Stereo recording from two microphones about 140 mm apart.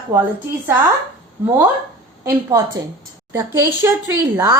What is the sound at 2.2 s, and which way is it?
A woman's voice, 20° right (ahead or behind).